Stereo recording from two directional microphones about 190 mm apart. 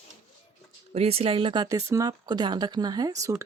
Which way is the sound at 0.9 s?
30° right (ahead or behind).